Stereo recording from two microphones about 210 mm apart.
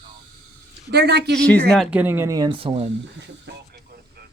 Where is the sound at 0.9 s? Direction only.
50° right (ahead or behind).